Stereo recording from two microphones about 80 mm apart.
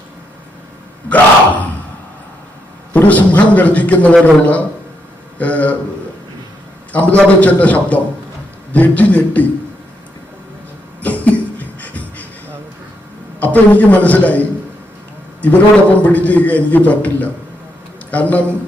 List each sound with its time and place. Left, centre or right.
2.9 s a man's voice: left
6.9 s a man's voice: centre
11.0 s a sound: centre
13.4 s a man's voice: left